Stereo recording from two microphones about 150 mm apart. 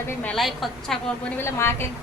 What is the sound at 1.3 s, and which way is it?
Speech, 15° left (ahead or behind).